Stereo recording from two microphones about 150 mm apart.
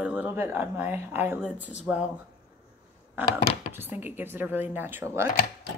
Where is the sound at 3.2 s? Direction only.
10° right (ahead or behind).